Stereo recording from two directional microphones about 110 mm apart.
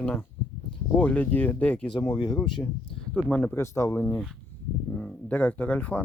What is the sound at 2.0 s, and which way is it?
Speech, 35° left (ahead or behind).